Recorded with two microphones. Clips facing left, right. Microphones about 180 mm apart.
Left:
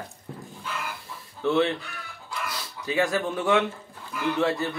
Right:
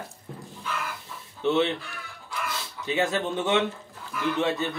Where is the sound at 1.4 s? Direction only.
20° right (ahead or behind).